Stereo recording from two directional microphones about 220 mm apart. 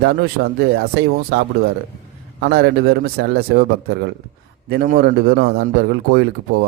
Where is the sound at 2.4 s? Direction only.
50° right (ahead or behind).